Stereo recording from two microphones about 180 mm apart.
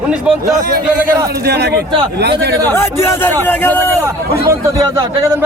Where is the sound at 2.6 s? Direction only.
15° left (ahead or behind).